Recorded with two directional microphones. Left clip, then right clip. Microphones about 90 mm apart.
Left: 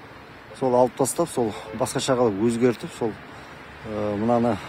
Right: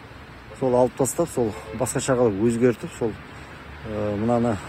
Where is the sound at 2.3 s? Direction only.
35° left (ahead or behind).